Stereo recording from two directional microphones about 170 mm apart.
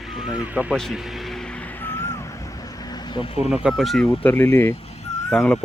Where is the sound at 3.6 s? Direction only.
Centre (ahead or behind).